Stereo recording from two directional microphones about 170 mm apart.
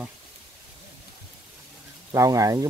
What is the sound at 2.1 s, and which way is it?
Speech, 20° right (ahead or behind).